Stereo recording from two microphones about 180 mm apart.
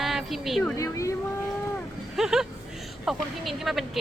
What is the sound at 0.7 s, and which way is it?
Speech, 15° left (ahead or behind).